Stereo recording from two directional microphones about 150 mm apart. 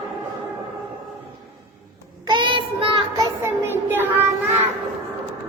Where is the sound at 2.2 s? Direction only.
30° right (ahead or behind).